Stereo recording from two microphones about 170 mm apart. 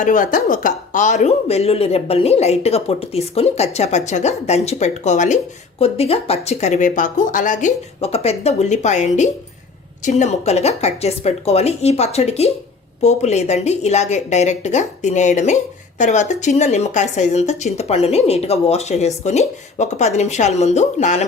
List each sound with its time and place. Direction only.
0.0 s speech: 50° left (ahead or behind)